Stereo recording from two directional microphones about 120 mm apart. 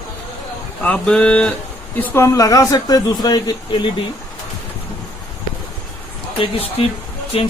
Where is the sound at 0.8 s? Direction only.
10° left (ahead or behind).